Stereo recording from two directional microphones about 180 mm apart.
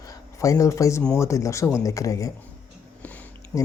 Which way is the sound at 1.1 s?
15° left (ahead or behind).